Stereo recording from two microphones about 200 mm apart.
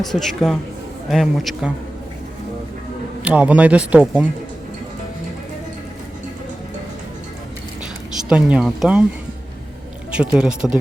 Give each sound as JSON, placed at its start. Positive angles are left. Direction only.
{"t": 0.0, "sound": "speech", "side_deg": 0}
{"t": 3.2, "sound": "speech", "side_deg": -5}
{"t": 8.3, "sound": "speech", "side_deg": -5}
{"t": 10.1, "sound": "speech", "side_deg": -5}